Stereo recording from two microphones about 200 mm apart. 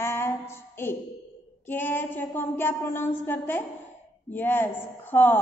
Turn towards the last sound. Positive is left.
turn(degrees=10)  # may be behind; listen again after turning